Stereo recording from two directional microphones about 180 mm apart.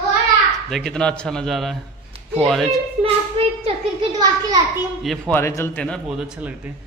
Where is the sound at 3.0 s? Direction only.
30° right (ahead or behind).